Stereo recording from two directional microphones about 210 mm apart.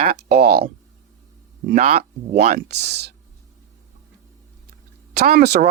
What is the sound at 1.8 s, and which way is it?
Speech, 40° right (ahead or behind).